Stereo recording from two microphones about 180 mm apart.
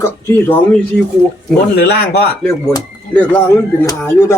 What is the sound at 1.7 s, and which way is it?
Speech, 65° left (ahead or behind).